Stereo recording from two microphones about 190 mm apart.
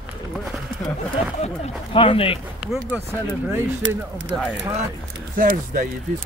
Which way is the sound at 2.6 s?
5° right (ahead or behind).